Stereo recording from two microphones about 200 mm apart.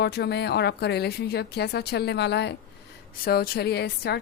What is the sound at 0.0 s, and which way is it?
A woman's voice, 55° left (ahead or behind).